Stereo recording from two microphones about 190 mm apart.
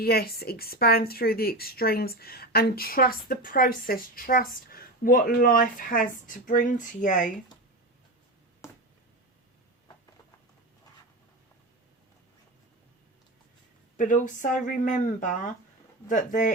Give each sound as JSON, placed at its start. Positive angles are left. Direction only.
{"t": 0.0, "sound": "speech", "side_deg": 55}
{"t": 8.6, "sound": "a sound", "side_deg": 15}
{"t": 13.9, "sound": "a woman's voice", "side_deg": 45}